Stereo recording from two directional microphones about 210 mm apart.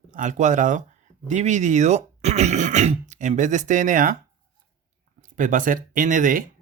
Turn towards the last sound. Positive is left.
turn(degrees=-40)  # may be behind; listen again after turning